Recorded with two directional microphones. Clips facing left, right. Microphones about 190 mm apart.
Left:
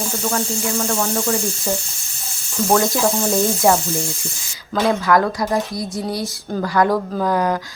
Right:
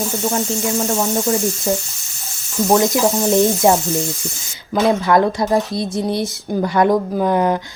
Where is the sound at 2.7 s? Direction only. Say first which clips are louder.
Right 2 dB; 20° right (ahead or behind).